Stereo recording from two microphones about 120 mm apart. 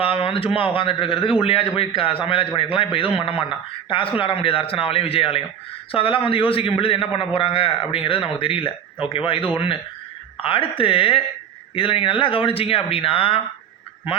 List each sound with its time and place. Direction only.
0.0 s a man's voice: 50° left (ahead or behind)